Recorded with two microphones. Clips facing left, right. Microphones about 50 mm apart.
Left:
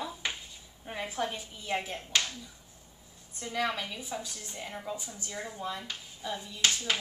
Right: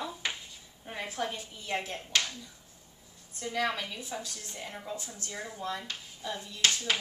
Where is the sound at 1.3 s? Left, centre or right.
Centre.